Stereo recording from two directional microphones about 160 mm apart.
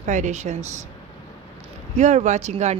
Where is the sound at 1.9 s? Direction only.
45° right (ahead or behind).